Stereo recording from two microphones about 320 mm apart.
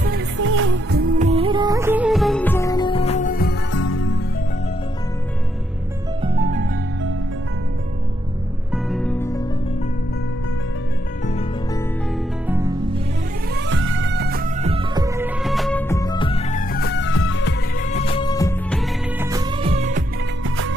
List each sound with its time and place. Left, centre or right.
0.0 s music: right; by 4.2 s left
6.2 s music: centre
8.7 s music: centre
11.2 s music: centre
12.4 s music: centre
13.6 s music: right; by 17.8 s left
17.9 s music of bollywood: centre
19.1 s music: centre
20.4 s music: right